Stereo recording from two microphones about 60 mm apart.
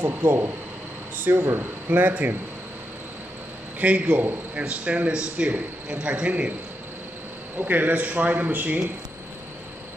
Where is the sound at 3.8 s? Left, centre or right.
Right.